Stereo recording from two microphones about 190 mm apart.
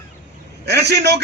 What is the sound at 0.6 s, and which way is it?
Speech, 60° right (ahead or behind).